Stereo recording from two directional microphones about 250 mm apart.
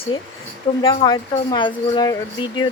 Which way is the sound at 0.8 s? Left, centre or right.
Centre.